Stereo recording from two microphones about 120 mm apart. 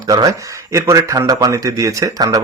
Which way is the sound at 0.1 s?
30° right (ahead or behind).